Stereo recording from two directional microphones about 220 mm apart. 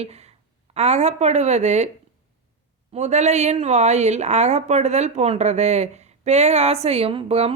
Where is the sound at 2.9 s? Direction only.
30° right (ahead or behind).